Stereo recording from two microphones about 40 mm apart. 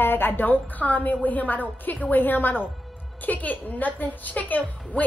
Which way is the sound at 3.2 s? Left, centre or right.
Left.